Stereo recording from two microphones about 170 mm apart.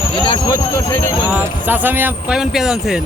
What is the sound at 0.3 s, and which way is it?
Speech, 20° left (ahead or behind).